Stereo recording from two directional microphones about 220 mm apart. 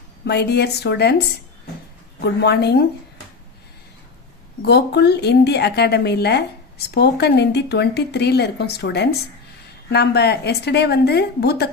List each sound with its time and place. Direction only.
0.3 s speech: 50° left (ahead or behind)
2.2 s speech: 50° left (ahead or behind)
4.6 s speech: 50° left (ahead or behind)